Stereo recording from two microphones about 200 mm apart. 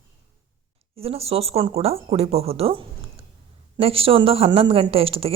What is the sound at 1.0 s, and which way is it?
A woman's voice, 30° right (ahead or behind).